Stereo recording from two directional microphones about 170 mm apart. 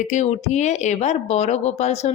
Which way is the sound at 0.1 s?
40° left (ahead or behind).